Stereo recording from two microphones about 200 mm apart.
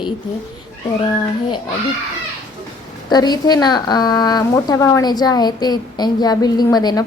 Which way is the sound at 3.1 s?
20° left (ahead or behind).